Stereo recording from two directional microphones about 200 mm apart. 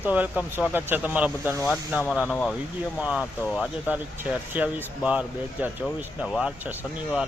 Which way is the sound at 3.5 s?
5° right (ahead or behind).